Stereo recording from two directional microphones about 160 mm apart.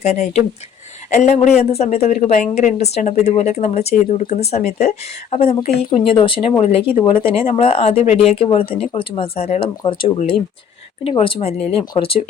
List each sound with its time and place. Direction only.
0.0 s a woman's voice: 45° left (ahead or behind)